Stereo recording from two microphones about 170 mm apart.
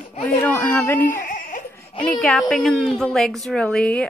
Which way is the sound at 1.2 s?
50° left (ahead or behind).